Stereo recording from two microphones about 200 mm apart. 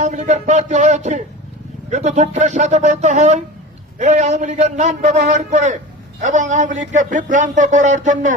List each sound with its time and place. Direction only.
0.0 s a man's voice: 35° right (ahead or behind)